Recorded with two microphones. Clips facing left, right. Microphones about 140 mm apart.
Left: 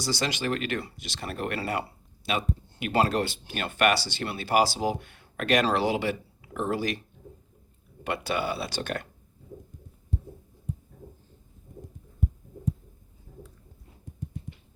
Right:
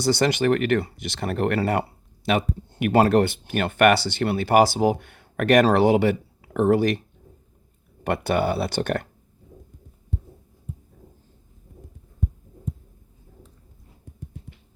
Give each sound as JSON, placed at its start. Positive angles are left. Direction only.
{"t": 0.0, "sound": "speech", "side_deg": -55}
{"t": 8.0, "sound": "speech", "side_deg": -55}